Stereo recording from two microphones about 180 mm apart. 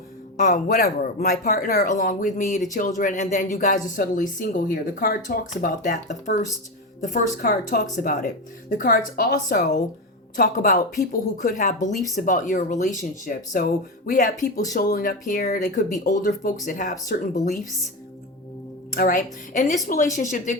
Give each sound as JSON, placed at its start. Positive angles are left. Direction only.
{"t": 0.3, "sound": "speech", "side_deg": 45}
{"t": 18.9, "sound": "speech", "side_deg": 50}